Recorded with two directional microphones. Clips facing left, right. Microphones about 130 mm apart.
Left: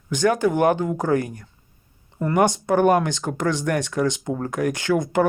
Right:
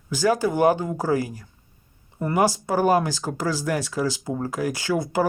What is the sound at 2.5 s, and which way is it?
Speech, 30° right (ahead or behind).